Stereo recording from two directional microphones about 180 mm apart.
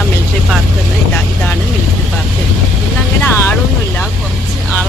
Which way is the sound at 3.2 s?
10° left (ahead or behind).